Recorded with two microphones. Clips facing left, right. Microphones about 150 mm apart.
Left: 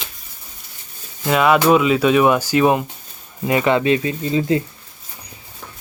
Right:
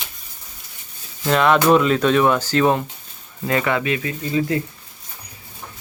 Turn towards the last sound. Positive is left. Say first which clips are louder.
# left 3 dB
turn(degrees=25)  # may be behind; listen again after turning